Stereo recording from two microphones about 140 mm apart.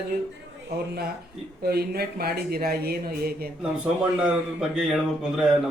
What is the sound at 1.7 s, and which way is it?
Speech, 90° right.